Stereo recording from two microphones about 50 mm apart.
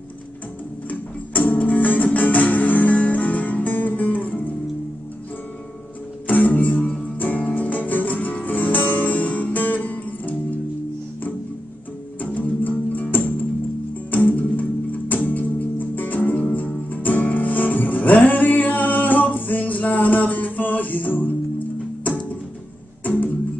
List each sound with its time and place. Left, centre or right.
0.8 s music: left
6.2 s music: left
12.2 s music: left
23.0 s music: left